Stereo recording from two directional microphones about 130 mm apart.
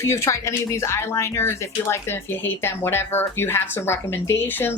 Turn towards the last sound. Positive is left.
turn(degrees=20)  # may be behind; listen again after turning